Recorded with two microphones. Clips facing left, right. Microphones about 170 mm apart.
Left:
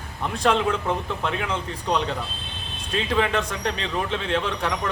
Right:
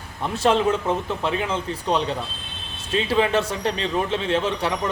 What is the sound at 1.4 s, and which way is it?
Speech, 5° right (ahead or behind).